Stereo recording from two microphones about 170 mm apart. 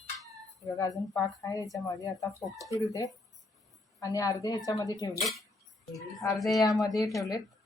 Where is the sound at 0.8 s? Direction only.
20° left (ahead or behind).